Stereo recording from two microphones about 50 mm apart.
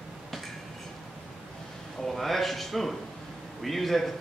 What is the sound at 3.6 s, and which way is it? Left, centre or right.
Speech, centre.